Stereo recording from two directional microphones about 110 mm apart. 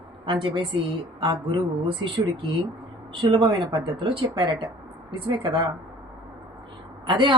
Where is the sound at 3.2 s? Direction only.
45° right (ahead or behind).